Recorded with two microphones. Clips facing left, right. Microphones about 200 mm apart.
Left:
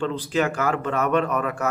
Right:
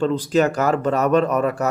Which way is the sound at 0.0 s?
40° right (ahead or behind).